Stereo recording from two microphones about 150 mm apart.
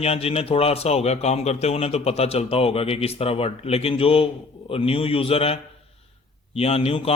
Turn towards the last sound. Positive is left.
turn(degrees=40)  # may be behind; listen again after turning